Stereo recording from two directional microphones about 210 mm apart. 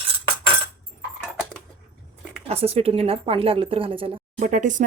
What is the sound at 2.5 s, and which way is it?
A woman's voice, 30° right (ahead or behind).